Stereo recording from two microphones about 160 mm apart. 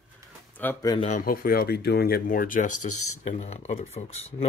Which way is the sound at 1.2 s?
65° left (ahead or behind).